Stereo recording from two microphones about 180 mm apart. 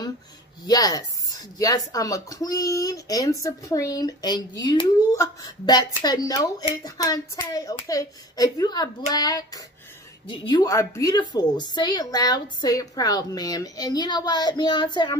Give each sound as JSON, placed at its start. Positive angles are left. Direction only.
{"t": 0.7, "sound": "speech", "side_deg": 20}